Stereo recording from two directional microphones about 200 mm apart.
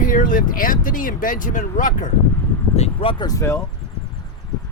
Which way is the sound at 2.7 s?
30° left (ahead or behind).